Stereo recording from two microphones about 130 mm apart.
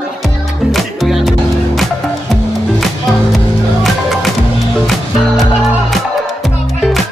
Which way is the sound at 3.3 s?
Centre (ahead or behind).